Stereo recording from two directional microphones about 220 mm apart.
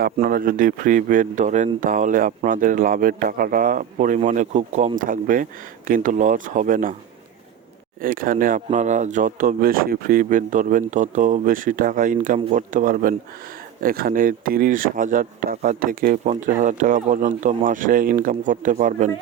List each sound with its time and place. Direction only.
0.0 s speech: 40° right (ahead or behind)
8.0 s speech: 40° right (ahead or behind)